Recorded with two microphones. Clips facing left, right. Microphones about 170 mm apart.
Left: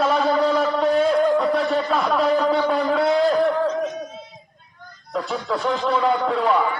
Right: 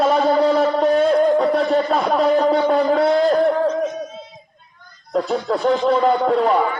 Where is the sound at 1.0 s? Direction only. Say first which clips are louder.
Right 3 dB; 40° right (ahead or behind).